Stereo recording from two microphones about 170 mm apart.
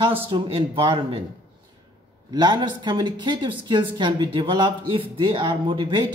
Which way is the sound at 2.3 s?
25° right (ahead or behind).